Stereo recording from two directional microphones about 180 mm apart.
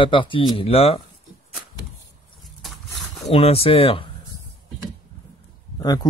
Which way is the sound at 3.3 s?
35° left (ahead or behind).